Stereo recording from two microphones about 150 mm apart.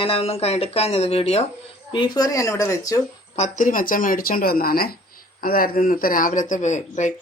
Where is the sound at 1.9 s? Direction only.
30° left (ahead or behind).